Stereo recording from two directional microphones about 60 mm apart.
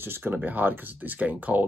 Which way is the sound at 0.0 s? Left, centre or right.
Right.